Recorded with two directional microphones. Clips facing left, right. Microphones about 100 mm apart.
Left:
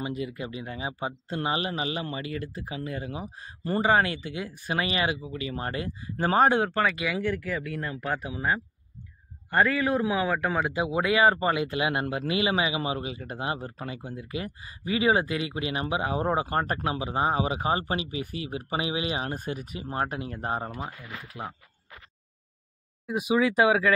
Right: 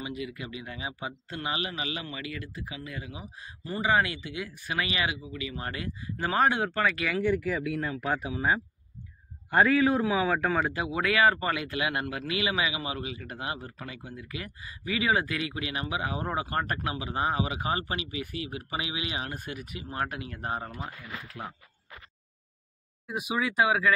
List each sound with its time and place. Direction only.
0.0 s speech: 35° left (ahead or behind)
3.6 s speech: 50° left (ahead or behind)
3.9 s speech: 35° left (ahead or behind)
7.2 s speech: 5° right (ahead or behind)
10.7 s speech: 20° left (ahead or behind)
21.3 s speech: 15° left (ahead or behind)